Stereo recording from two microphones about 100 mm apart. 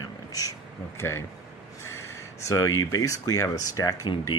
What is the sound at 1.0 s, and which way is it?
Speech, 25° left (ahead or behind).